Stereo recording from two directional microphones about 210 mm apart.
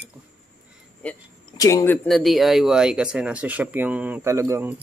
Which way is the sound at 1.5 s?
20° left (ahead or behind).